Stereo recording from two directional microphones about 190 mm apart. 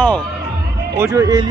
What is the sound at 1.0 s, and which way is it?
Speech, 20° right (ahead or behind).